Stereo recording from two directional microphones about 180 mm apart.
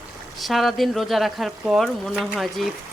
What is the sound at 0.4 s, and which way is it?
Speech, centre (ahead or behind).